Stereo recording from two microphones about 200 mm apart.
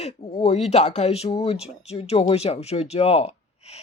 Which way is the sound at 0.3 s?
30° left (ahead or behind).